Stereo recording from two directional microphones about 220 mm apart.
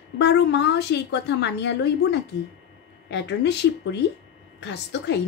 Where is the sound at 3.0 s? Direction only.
50° left (ahead or behind).